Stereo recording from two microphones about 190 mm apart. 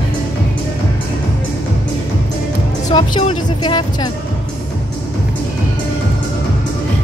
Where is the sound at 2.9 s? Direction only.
25° left (ahead or behind).